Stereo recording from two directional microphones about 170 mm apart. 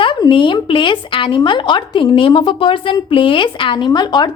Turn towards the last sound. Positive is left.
turn(degrees=25)  # may be behind; listen again after turning